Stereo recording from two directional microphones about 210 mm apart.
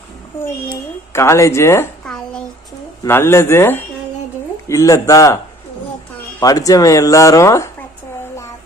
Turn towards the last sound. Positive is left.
turn(degrees=15)  # may be behind; listen again after turning